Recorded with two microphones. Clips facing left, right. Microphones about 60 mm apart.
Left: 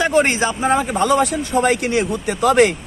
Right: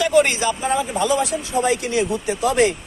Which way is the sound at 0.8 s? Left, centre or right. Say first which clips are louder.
Left 4 dB; left.